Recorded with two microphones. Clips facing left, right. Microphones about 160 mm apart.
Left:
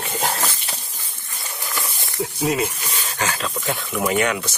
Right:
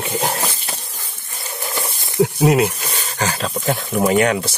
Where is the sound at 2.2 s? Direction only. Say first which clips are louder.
Right 7 dB; 70° right (ahead or behind).